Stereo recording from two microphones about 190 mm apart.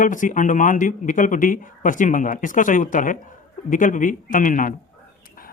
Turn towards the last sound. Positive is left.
turn(degrees=45)  # may be behind; listen again after turning